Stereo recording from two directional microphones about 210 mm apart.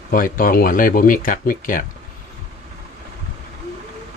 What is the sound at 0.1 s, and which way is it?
Speech, 40° left (ahead or behind).